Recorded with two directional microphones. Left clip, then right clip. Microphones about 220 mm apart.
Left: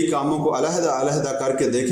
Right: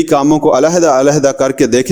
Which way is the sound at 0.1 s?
50° right (ahead or behind).